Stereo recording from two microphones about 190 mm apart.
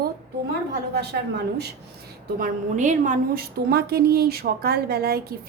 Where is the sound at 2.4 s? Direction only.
40° right (ahead or behind).